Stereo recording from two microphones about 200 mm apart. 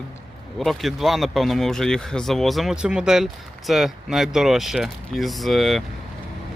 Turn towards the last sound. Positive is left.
turn(degrees=0)  # may be behind; listen again after turning